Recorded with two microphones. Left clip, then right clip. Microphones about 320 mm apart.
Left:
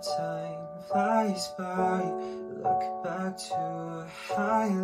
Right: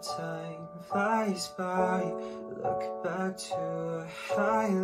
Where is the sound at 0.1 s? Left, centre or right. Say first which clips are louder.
Left 5 dB; centre.